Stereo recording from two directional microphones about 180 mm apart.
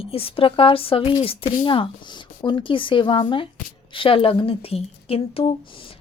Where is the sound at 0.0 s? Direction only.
30° left (ahead or behind).